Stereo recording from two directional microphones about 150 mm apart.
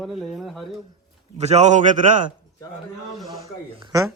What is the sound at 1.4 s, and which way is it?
Speech, 50° right (ahead or behind).